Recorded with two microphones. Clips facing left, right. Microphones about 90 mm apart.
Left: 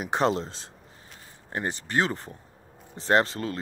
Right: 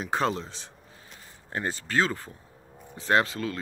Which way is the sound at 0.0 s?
20° left (ahead or behind).